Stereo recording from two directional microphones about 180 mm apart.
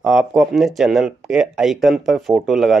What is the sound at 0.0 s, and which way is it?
Speech, 5° right (ahead or behind).